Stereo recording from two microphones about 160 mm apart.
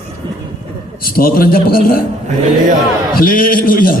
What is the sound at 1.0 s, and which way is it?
A man's voice, 65° left (ahead or behind).